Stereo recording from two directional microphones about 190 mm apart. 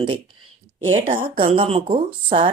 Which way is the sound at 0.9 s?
40° right (ahead or behind).